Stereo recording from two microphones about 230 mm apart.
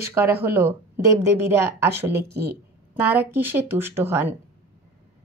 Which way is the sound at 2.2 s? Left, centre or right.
Right.